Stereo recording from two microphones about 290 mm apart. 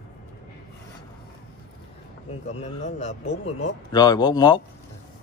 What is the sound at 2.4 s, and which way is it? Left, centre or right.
A man's voice, left.